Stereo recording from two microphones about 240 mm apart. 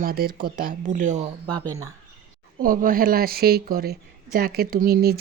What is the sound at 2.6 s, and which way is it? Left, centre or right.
Speech, right.